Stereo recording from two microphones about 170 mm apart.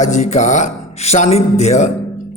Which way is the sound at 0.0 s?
45° left (ahead or behind).